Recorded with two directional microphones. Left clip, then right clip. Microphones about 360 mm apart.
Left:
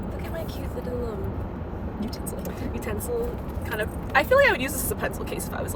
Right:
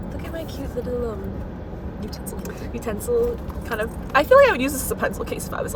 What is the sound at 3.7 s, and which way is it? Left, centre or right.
Speech, centre.